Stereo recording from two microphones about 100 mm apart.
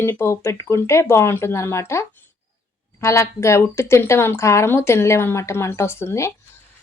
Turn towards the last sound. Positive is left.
turn(degrees=25)  # may be behind; listen again after turning